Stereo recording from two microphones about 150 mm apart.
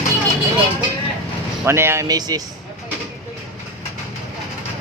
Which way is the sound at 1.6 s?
15° right (ahead or behind).